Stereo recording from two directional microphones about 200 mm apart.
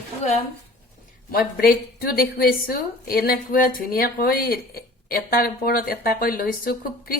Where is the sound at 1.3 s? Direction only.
50° left (ahead or behind).